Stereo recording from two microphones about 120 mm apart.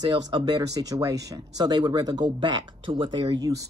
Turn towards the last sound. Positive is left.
turn(degrees=-30)  # may be behind; listen again after turning